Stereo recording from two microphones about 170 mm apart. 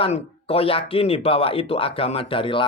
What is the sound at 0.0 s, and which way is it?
Speech, 35° left (ahead or behind).